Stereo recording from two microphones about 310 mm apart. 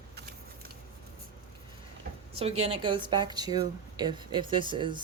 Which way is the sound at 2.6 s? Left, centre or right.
Centre.